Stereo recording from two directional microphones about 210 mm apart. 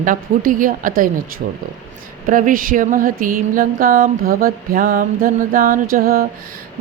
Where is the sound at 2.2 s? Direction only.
40° right (ahead or behind).